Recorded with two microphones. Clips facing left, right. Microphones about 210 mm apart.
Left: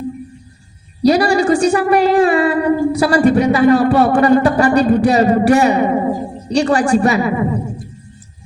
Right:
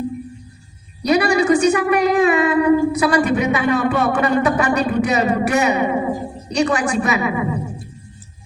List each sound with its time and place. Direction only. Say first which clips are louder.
1.0 s a woman's voice: left 3 dB; 35° left (ahead or behind)